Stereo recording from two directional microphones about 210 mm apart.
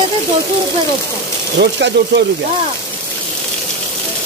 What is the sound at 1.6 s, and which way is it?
Speech, 55° right (ahead or behind).